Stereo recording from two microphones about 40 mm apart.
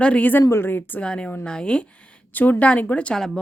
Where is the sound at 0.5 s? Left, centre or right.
Left.